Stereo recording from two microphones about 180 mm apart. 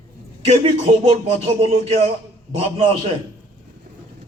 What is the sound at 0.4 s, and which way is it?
A man's voice, 35° right (ahead or behind).